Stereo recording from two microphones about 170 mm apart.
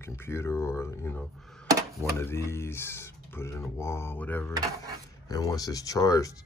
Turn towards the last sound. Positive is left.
turn(degrees=20)  # may be behind; listen again after turning